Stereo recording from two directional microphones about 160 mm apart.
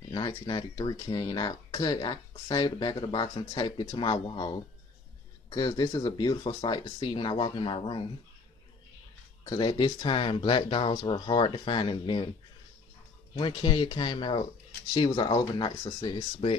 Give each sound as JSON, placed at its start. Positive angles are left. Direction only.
{"t": 0.1, "sound": "speech", "side_deg": 25}
{"t": 9.4, "sound": "speech", "side_deg": 25}
{"t": 13.3, "sound": "speech", "side_deg": 35}